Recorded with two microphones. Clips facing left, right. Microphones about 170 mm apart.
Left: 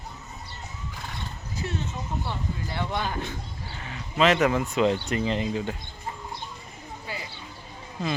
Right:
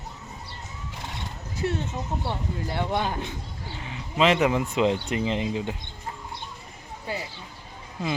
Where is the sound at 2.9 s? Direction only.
20° right (ahead or behind).